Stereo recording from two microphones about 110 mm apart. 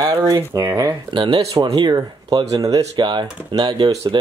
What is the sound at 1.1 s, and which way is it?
Speech, 45° right (ahead or behind).